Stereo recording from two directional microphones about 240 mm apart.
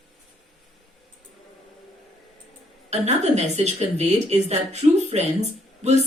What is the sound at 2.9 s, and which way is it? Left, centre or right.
Speech, right.